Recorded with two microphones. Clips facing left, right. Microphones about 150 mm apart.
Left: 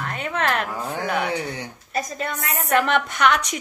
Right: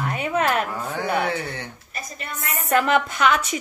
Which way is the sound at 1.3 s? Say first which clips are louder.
Left 1 dB; 15° left (ahead or behind).